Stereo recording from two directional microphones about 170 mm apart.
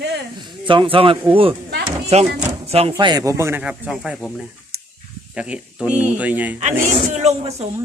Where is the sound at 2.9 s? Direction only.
25° right (ahead or behind); by 4.3 s 5° right (ahead or behind).